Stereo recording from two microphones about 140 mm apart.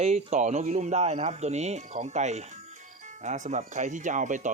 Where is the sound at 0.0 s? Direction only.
50° right (ahead or behind).